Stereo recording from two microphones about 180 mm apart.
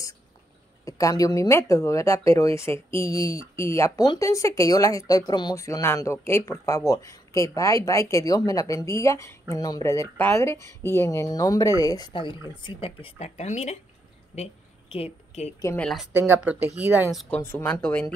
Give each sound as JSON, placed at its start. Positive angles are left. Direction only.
{"t": 0.8, "sound": "speech", "side_deg": 20}
{"t": 14.3, "sound": "a sound", "side_deg": 35}
{"t": 15.6, "sound": "speech", "side_deg": 10}
{"t": 15.9, "sound": "speech", "side_deg": -5}
{"t": 17.1, "sound": "speech", "side_deg": 0}
{"t": 17.4, "sound": "speech", "side_deg": 15}